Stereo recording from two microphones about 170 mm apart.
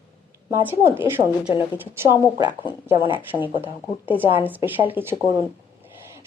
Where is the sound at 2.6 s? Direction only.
30° left (ahead or behind).